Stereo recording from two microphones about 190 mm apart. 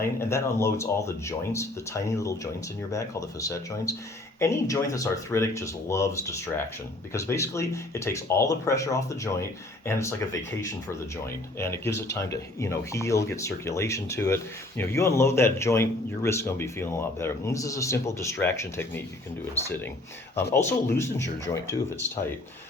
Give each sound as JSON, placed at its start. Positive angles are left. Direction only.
{"t": 0.2, "sound": "speech", "side_deg": 15}
{"t": 11.6, "sound": "speech", "side_deg": 15}
{"t": 20.5, "sound": "speech", "side_deg": 15}